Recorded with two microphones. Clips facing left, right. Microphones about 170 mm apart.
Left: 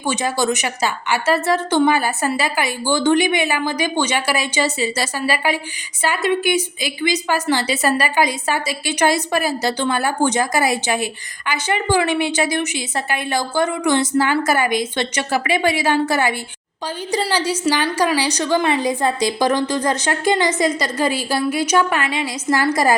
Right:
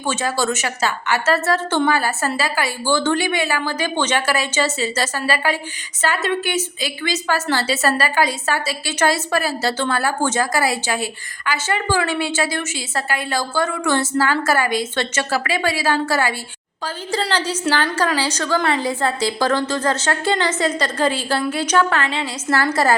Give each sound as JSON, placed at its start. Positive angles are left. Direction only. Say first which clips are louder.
{"t": 0.0, "sound": "a woman's voice", "louder": "left 1 dB", "side_deg": 15}